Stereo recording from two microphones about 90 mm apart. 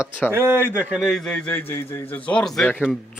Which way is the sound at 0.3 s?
25° right (ahead or behind).